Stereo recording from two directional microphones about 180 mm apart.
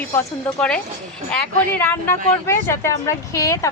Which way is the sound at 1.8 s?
15° left (ahead or behind).